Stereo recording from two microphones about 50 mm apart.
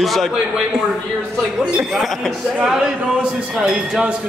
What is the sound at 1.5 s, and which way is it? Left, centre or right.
Speech, centre.